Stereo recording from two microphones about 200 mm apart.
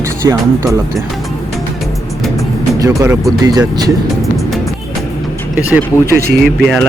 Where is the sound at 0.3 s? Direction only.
15° right (ahead or behind).